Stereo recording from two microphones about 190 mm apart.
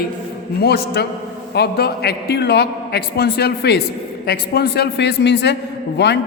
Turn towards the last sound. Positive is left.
turn(degrees=65)  # may be behind; listen again after turning